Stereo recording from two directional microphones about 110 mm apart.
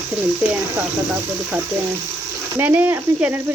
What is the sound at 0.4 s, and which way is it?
Speech, 15° right (ahead or behind).